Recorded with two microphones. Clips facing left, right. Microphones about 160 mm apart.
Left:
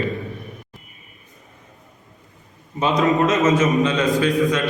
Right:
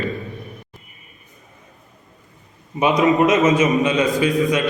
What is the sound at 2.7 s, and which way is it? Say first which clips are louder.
A man's voice: right 2 dB; 10° right (ahead or behind).